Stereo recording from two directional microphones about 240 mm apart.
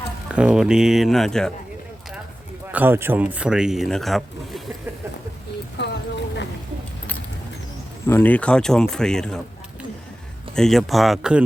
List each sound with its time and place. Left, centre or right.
0.3 s speech: centre
2.7 s speech: centre
5.7 s a sound: left
8.0 s speech: centre
10.5 s speech: centre